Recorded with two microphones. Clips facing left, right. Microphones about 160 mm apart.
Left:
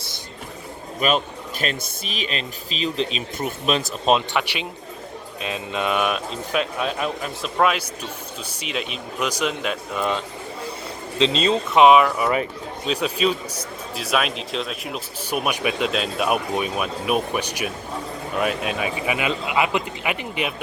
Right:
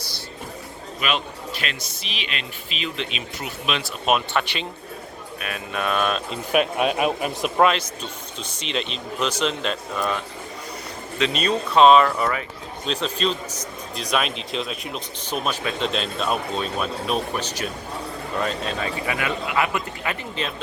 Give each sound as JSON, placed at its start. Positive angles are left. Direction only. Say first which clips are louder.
{"t": 0.9, "sound": "speech", "louder": "left 5 dB", "side_deg": 40}
{"t": 4.4, "sound": "speech", "louder": "even", "side_deg": 10}
{"t": 5.4, "sound": "speech", "louder": "left 2 dB", "side_deg": 20}
{"t": 6.5, "sound": "speech", "louder": "right 4 dB", "side_deg": -60}
{"t": 7.0, "sound": "speech", "louder": "right 4 dB", "side_deg": -15}
{"t": 7.6, "sound": "speech", "louder": "right 1 dB", "side_deg": 10}
{"t": 10.0, "sound": "speech", "louder": "left 3 dB", "side_deg": 20}